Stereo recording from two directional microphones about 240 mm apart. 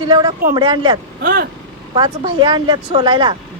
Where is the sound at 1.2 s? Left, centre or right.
Right.